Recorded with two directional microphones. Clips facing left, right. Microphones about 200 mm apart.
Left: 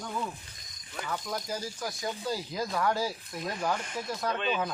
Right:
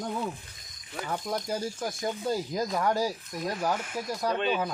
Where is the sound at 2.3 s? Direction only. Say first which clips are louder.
Right 5 dB; 45° right (ahead or behind).